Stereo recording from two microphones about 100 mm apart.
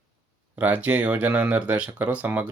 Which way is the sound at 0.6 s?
15° right (ahead or behind).